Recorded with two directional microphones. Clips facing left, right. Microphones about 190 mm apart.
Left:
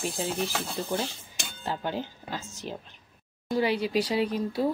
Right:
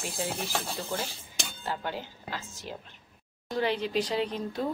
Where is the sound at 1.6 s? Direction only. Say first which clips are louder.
Left 4 dB; 15° left (ahead or behind).